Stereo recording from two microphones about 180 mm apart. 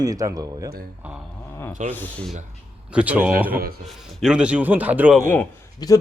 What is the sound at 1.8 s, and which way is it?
Speech, 10° left (ahead or behind).